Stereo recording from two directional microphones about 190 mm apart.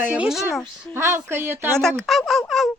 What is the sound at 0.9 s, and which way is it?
Speech, 15° right (ahead or behind).